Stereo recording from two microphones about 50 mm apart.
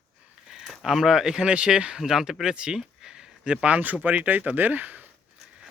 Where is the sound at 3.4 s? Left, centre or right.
Right.